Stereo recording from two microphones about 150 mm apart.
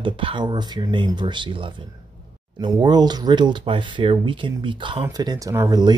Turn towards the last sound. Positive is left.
turn(degrees=-25)  # may be behind; listen again after turning